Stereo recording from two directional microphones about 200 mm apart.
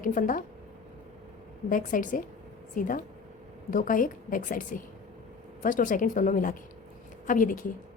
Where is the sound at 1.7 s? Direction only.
40° left (ahead or behind).